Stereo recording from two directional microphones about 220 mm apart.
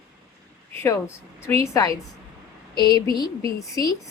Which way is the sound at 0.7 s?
10° left (ahead or behind).